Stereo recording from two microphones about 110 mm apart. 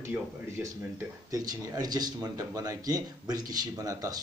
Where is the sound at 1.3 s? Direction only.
35° right (ahead or behind).